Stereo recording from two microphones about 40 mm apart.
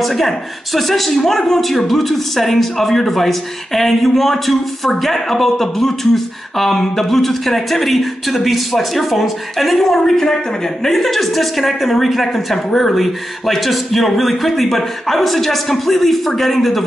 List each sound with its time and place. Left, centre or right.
0.0 s a man's voice: centre